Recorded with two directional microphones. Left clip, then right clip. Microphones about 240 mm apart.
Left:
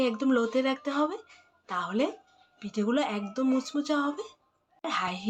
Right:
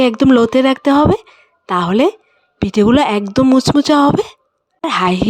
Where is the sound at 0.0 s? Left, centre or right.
Right.